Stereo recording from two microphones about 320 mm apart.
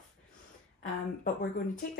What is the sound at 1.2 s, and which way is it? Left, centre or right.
Speech, left.